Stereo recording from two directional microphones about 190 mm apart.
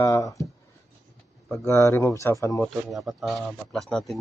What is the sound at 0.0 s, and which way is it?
Speech, 15° left (ahead or behind).